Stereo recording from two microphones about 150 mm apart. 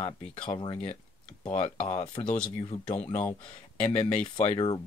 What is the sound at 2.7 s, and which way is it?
Speech, 40° left (ahead or behind).